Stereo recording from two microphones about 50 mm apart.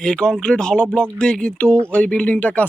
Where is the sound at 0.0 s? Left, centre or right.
Centre.